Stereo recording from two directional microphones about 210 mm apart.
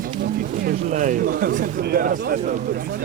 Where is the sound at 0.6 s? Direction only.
40° right (ahead or behind).